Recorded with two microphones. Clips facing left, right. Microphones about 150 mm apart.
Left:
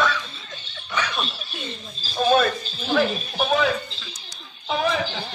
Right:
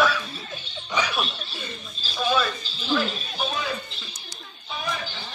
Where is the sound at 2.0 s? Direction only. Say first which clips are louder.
Left 5 dB; 45° left (ahead or behind); by 3.7 s 65° left (ahead or behind).